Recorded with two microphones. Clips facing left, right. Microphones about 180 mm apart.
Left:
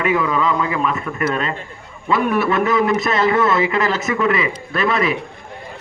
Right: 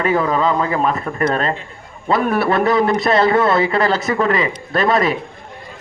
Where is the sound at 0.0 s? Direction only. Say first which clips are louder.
Right 2 dB; 35° right (ahead or behind).